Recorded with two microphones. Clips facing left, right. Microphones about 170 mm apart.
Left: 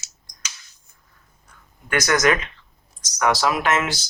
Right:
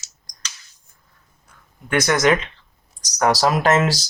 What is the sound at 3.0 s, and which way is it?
Speech, 40° right (ahead or behind).